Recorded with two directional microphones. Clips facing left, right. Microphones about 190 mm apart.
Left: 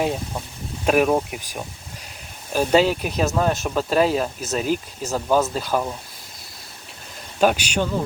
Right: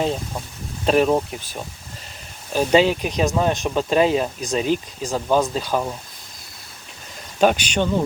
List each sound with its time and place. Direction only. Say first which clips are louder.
0.9 s speech: right 1 dB; 10° left (ahead or behind)
5.7 s speech: even; 5° right (ahead or behind)
7.3 s speech: right 1 dB; 5° left (ahead or behind)